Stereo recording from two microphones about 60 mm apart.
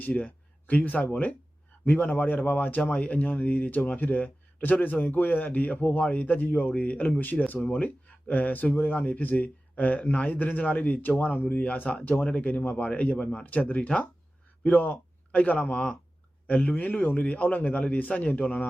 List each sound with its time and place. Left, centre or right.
0.0 s a man's voice: left